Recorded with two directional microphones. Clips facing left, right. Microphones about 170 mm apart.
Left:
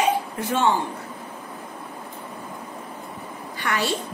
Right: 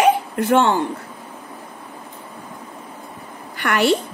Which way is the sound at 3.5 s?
70° right (ahead or behind).